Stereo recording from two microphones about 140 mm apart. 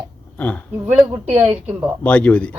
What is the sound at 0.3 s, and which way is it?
Speech, 10° left (ahead or behind).